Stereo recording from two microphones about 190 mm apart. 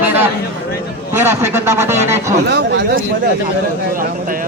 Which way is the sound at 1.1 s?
15° right (ahead or behind).